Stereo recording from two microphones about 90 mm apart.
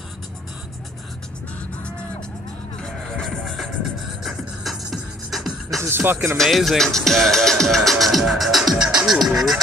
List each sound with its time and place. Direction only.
2.8 s music: 5° left (ahead or behind)
5.9 s speech: 25° right (ahead or behind)
6.3 s speech: centre (ahead or behind)